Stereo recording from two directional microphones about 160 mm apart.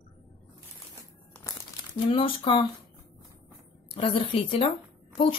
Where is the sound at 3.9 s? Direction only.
35° left (ahead or behind).